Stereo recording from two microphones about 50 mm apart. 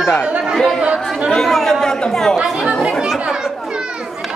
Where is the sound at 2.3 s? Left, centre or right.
Centre.